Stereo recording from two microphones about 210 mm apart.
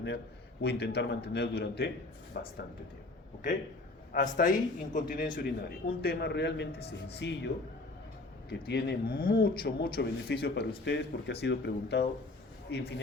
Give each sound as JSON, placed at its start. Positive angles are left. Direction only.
{"t": 0.6, "sound": "speech", "side_deg": 50}
{"t": 4.1, "sound": "speech", "side_deg": 40}